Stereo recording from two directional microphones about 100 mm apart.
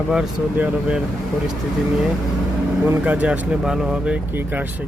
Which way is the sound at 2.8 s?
15° right (ahead or behind).